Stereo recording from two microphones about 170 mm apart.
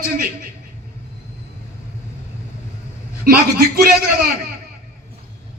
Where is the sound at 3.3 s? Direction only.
60° right (ahead or behind).